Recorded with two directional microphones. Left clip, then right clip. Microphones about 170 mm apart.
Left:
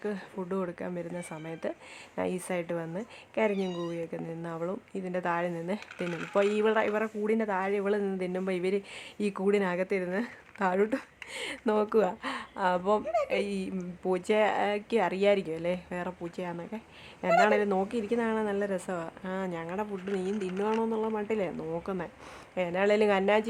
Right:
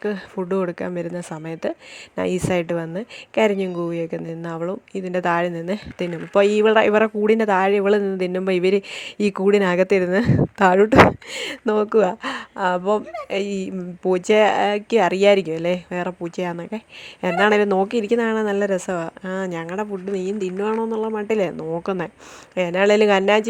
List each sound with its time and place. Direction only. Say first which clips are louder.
0.0 s a woman's voice: right 10 dB; 35° right (ahead or behind)